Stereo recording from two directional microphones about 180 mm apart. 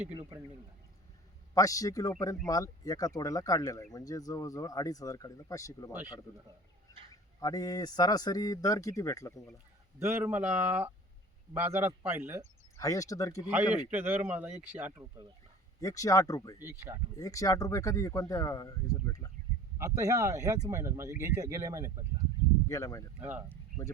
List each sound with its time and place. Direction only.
1.5 s a man's voice: 20° left (ahead or behind)
7.1 s a man's voice: 20° left (ahead or behind)
10.0 s speech: 15° right (ahead or behind)
12.7 s a man's voice: 20° left (ahead or behind)
13.4 s speech: 10° right (ahead or behind)
15.8 s a man's voice: 20° left (ahead or behind)
16.6 s speech: 10° right (ahead or behind)
17.2 s a man's voice: 20° left (ahead or behind)
19.8 s speech: 15° right (ahead or behind)
22.7 s a man's voice: 20° left (ahead or behind)
23.2 s speech: 10° right (ahead or behind)